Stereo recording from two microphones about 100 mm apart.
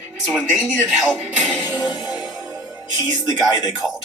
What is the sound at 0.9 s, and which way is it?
Speech, 10° right (ahead or behind).